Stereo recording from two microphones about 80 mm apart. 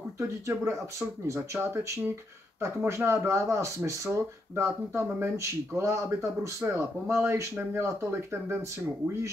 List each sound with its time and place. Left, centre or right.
0.2 s speech: right